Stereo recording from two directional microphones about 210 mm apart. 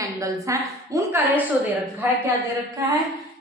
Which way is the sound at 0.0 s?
15° right (ahead or behind).